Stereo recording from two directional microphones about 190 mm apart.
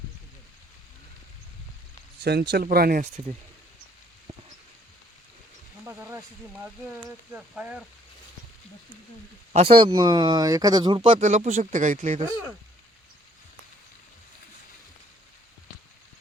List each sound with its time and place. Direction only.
2.5 s speech: 55° right (ahead or behind)
5.8 s a sound: 10° right (ahead or behind)
7.3 s speech: 5° right (ahead or behind)
9.5 s speech: 30° right (ahead or behind)
11.2 s speech: 40° right (ahead or behind)